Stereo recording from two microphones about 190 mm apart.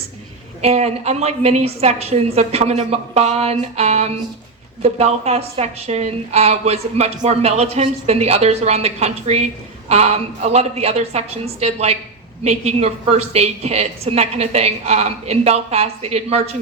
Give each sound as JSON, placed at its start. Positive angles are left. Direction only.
{"t": 0.6, "sound": "a woman's voice", "side_deg": -35}